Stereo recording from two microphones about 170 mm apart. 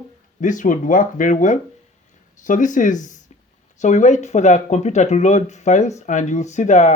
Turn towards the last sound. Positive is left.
turn(degrees=45)  # may be behind; listen again after turning